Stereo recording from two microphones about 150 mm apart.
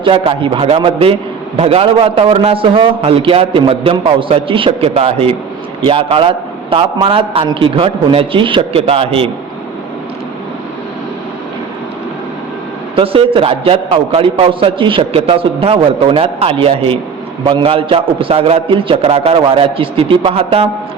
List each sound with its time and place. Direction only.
0.0 s a man's voice: 35° right (ahead or behind)
13.0 s a man's voice: 35° right (ahead or behind)